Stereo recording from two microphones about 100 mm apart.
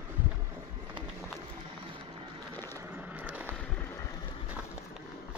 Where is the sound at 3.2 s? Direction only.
15° right (ahead or behind).